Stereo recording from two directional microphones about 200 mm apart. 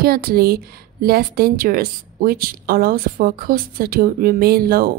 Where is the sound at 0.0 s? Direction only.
50° right (ahead or behind).